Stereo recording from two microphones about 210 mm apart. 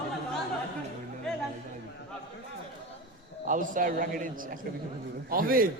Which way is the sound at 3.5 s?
40° right (ahead or behind).